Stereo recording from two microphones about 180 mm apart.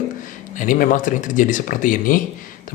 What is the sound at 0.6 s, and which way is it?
Speech, 50° left (ahead or behind).